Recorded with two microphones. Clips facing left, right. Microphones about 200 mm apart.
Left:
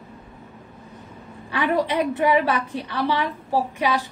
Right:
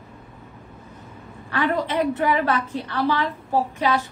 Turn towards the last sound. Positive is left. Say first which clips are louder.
# right 1 dB
turn(degrees=15)  # may be behind; listen again after turning